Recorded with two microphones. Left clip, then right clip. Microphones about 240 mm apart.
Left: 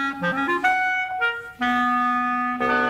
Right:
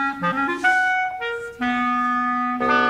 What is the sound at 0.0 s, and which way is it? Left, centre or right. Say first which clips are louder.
Clarinet: right 2 dB; centre.